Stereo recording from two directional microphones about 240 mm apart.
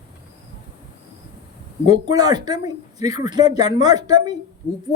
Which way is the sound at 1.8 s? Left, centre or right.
Centre.